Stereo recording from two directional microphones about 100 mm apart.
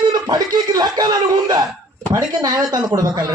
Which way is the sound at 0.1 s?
45° right (ahead or behind).